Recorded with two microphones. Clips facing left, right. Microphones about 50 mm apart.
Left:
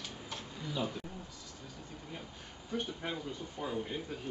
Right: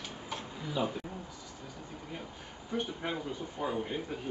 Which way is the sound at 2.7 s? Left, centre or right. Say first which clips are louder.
Right 3 dB; centre.